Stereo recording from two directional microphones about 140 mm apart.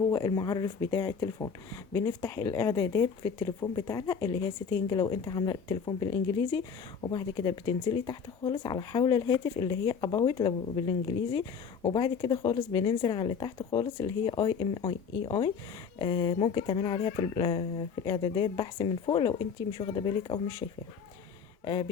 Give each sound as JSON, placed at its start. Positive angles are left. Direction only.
{"t": 0.1, "sound": "speech", "side_deg": 30}
{"t": 21.6, "sound": "speech", "side_deg": 35}